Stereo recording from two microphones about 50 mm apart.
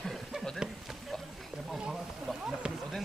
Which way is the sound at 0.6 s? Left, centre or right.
Centre.